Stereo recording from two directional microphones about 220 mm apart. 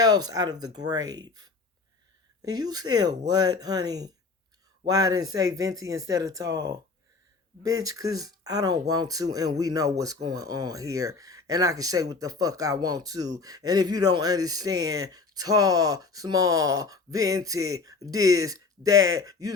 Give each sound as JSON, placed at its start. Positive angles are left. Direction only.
{"t": 0.0, "sound": "speech", "side_deg": -15}